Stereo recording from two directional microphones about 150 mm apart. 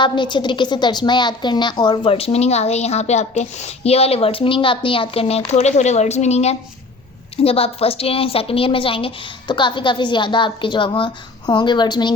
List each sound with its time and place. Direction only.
0.0 s a woman's voice: 30° left (ahead or behind)